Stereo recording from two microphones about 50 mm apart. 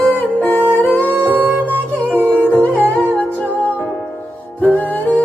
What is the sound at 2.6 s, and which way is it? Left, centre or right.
Music, left.